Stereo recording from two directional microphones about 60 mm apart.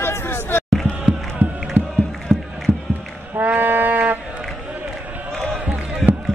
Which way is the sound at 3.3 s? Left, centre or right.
Right.